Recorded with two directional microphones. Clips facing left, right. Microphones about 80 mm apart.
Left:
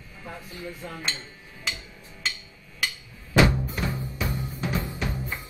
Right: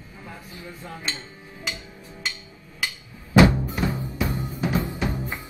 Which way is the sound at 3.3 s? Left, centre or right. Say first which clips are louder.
Right 4 dB; right.